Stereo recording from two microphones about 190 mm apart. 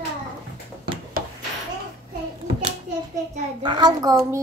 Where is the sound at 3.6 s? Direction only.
20° right (ahead or behind).